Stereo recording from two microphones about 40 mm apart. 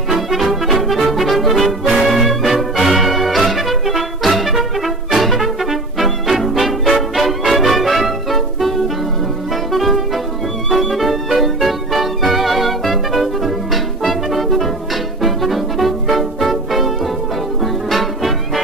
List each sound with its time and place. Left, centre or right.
0.1 s music: centre